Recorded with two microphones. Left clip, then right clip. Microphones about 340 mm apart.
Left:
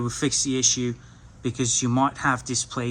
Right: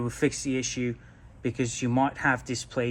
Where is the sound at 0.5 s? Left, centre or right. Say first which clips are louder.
Left 6 dB; centre.